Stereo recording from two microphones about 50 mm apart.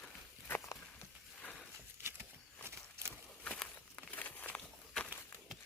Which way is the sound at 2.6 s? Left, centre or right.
Right.